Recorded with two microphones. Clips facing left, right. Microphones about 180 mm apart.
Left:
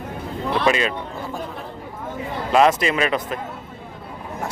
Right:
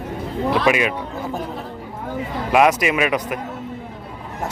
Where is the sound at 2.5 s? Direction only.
10° right (ahead or behind).